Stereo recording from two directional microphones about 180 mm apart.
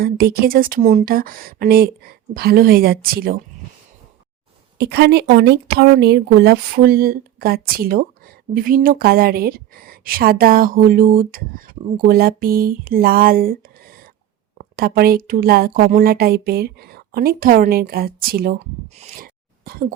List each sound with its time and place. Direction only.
0.0 s a woman's voice: 60° right (ahead or behind)
4.8 s a woman's voice: 70° right (ahead or behind)
18.9 s a sound: 45° right (ahead or behind)